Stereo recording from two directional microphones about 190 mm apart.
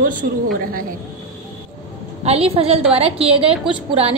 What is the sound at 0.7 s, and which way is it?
Speech, 50° right (ahead or behind).